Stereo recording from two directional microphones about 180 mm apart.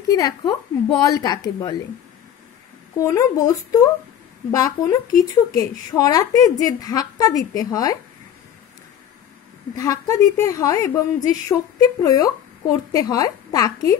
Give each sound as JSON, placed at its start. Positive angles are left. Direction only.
{"t": 0.1, "sound": "a woman's voice", "side_deg": 20}
{"t": 3.0, "sound": "a woman's voice", "side_deg": 15}
{"t": 9.8, "sound": "a woman's voice", "side_deg": 20}